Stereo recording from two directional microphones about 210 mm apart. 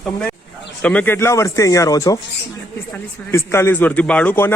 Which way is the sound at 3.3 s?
15° left (ahead or behind).